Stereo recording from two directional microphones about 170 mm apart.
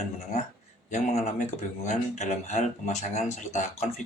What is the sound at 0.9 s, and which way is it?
Speech, 45° left (ahead or behind).